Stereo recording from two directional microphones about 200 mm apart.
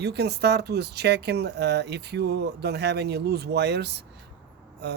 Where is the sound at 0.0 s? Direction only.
55° right (ahead or behind).